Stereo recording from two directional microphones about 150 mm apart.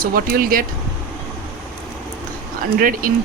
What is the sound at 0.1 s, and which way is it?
Speech, 85° right.